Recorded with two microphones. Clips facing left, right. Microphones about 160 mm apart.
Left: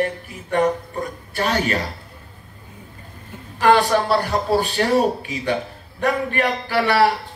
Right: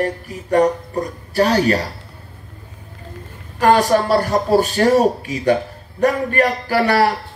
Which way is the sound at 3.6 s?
40° right (ahead or behind).